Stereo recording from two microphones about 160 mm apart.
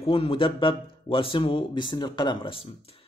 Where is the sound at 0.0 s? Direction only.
35° left (ahead or behind).